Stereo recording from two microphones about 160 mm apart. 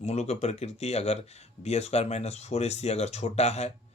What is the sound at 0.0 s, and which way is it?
Speech, 40° left (ahead or behind).